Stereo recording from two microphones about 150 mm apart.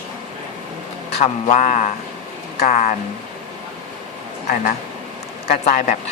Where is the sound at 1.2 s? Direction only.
50° left (ahead or behind).